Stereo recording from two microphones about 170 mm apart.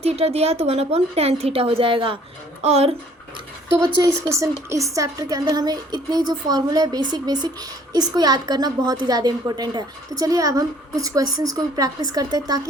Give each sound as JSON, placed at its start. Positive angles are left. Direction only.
{"t": 0.0, "sound": "speech", "side_deg": -35}
{"t": 3.8, "sound": "a woman's voice", "side_deg": -20}